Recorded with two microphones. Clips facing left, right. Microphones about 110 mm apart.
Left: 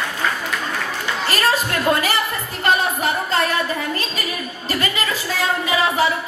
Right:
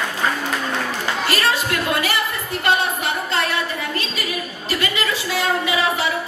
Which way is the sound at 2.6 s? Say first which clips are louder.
Left 2 dB; 40° left (ahead or behind).